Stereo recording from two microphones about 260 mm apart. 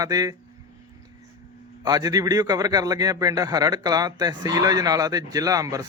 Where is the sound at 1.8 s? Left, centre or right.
Centre.